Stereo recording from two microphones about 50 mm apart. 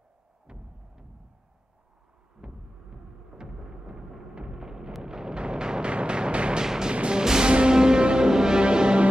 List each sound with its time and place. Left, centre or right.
0.5 s music: centre
2.4 s a sound: centre
4.4 s music: centre